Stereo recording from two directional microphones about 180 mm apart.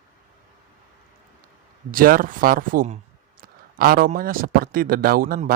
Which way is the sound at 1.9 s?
50° right (ahead or behind).